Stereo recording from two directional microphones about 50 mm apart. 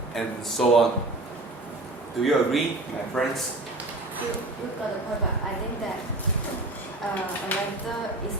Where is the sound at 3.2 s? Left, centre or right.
Centre.